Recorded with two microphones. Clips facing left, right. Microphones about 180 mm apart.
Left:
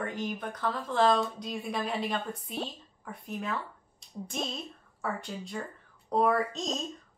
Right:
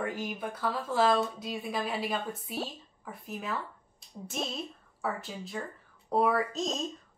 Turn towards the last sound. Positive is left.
turn(degrees=0)  # may be behind; listen again after turning